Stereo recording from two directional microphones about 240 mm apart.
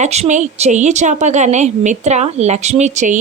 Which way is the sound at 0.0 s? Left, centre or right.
Right.